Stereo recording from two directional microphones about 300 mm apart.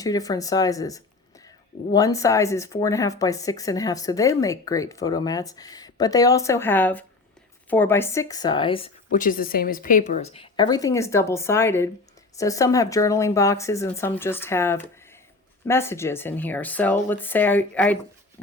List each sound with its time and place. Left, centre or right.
0.0 s speech: centre
9.1 s speech: left; by 17.9 s centre